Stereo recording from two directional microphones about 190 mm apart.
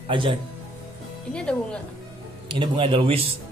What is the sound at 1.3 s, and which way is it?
Speech, 5° left (ahead or behind).